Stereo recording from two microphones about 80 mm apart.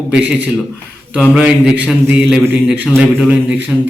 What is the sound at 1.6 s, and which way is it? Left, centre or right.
Speech, centre.